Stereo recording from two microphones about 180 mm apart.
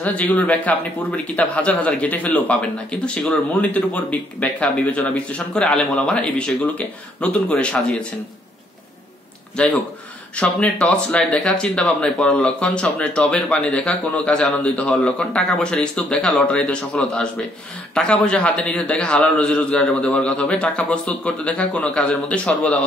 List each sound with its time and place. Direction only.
0.0 s speech: 5° left (ahead or behind)
10.3 s speech: 5° left (ahead or behind)